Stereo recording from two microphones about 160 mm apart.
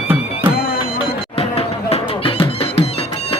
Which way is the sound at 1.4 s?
35° left (ahead or behind).